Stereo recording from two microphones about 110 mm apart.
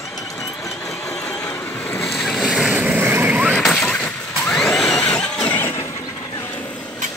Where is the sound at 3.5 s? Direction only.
5° left (ahead or behind).